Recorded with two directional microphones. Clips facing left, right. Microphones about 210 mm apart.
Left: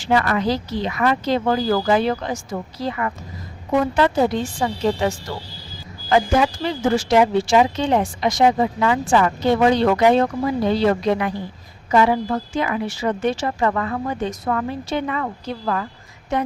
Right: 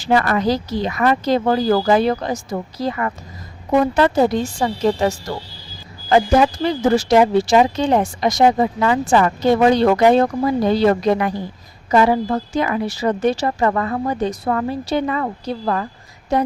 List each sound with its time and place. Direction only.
0.0 s speech: 40° right (ahead or behind)